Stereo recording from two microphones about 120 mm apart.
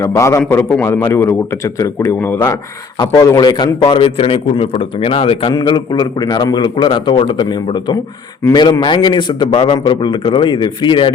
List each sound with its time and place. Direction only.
0.0 s a man's voice: 25° left (ahead or behind)
3.0 s a man's voice: 30° left (ahead or behind)
3.8 s a man's voice: 50° left (ahead or behind)
5.5 s a man's voice: 35° left (ahead or behind)